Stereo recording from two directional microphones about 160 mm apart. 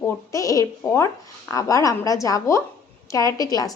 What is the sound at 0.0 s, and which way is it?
A woman's voice, 20° left (ahead or behind).